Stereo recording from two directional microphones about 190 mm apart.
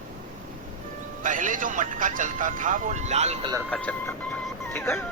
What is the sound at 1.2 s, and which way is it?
Speech, 45° right (ahead or behind).